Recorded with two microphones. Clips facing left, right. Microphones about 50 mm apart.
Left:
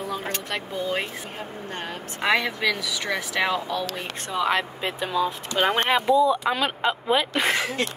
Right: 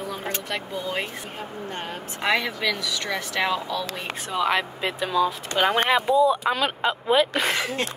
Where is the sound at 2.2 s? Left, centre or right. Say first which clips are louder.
Left 1 dB; centre.